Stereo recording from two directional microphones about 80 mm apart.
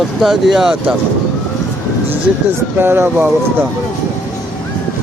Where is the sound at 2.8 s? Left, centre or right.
Right.